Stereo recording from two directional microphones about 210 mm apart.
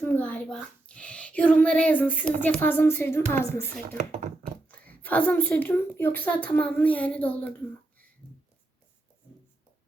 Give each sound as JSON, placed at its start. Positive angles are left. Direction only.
{"t": 0.0, "sound": "a child's voice", "side_deg": 5}
{"t": 3.9, "sound": "speech", "side_deg": -35}
{"t": 4.7, "sound": "speech", "side_deg": 5}